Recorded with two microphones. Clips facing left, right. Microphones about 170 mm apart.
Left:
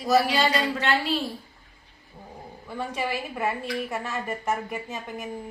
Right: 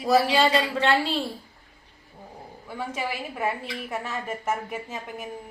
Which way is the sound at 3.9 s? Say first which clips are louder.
Left 1 dB; 5° right (ahead or behind).